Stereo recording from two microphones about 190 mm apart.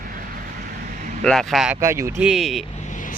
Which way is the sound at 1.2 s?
Centre (ahead or behind).